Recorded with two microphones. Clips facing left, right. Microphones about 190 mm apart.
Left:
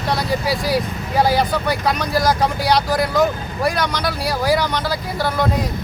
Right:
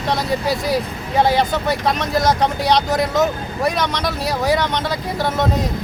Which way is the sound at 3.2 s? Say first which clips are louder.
Even; 20° right (ahead or behind).